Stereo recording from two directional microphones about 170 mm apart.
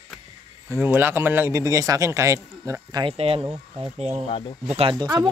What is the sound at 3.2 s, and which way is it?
Speech, 35° right (ahead or behind).